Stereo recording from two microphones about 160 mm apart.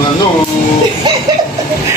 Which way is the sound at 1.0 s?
25° right (ahead or behind).